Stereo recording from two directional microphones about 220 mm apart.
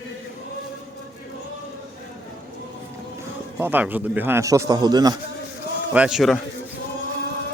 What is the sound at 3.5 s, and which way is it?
Speech, 10° right (ahead or behind).